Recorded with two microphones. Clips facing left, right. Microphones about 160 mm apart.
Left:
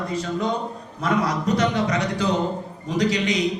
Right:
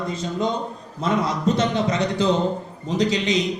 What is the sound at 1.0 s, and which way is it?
Speech, 25° right (ahead or behind).